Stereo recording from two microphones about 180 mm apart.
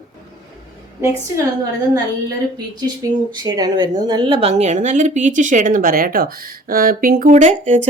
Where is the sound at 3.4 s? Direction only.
25° right (ahead or behind).